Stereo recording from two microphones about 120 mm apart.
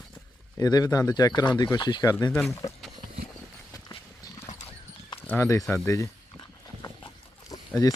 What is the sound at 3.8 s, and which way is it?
Clip-clop, 30° left (ahead or behind).